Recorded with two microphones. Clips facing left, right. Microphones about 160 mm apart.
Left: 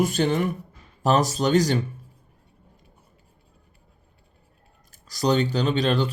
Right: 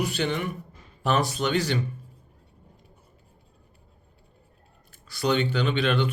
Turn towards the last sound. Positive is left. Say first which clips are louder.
# left 2 dB
turn(degrees=35)  # may be behind; listen again after turning